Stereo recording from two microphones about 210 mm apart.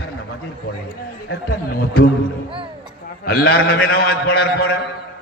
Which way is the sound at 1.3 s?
45° left (ahead or behind).